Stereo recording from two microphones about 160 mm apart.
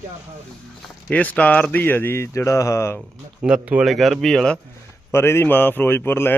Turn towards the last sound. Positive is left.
turn(degrees=15)  # may be behind; listen again after turning